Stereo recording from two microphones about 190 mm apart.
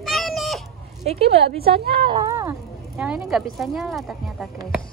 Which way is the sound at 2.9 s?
5° right (ahead or behind).